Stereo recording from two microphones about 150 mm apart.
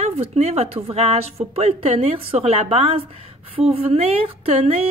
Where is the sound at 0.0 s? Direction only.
45° right (ahead or behind).